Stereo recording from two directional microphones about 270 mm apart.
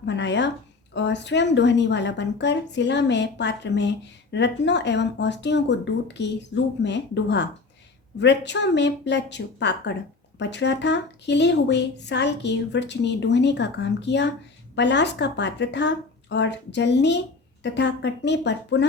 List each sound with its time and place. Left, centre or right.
0.0 s a woman's voice: left